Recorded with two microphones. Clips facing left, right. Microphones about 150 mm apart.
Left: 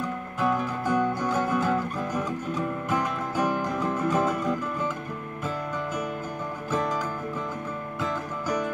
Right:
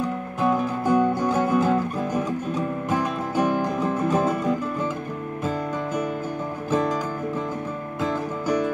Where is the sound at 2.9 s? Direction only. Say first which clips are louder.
Right 4 dB; 25° right (ahead or behind).